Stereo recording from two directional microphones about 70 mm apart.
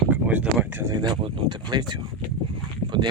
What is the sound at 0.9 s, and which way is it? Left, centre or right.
Speech, right.